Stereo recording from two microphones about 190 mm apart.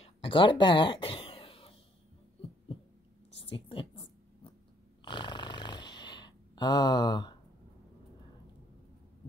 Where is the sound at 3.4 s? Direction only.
25° left (ahead or behind).